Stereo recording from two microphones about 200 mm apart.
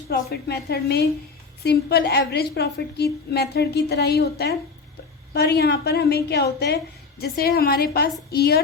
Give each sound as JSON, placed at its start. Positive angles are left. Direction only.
{"t": 0.1, "sound": "a woman's voice", "side_deg": 50}